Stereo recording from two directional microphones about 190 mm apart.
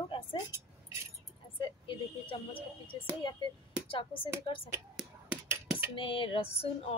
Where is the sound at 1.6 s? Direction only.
25° left (ahead or behind).